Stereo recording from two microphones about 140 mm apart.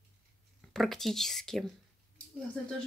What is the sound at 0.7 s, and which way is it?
Speech, centre (ahead or behind).